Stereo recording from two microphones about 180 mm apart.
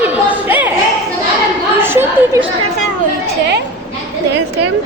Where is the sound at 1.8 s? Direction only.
10° right (ahead or behind).